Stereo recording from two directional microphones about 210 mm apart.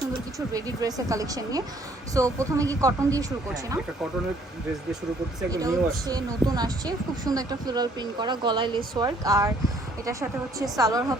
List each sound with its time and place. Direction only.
0.5 s speech: 15° right (ahead or behind)
5.5 s speech: 15° right (ahead or behind)